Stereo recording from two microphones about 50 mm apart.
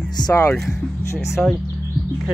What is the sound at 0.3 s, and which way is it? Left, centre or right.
Speech, left.